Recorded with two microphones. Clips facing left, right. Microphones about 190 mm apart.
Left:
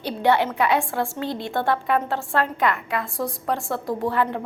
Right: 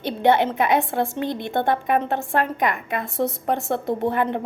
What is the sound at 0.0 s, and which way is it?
A woman's voice, 20° right (ahead or behind).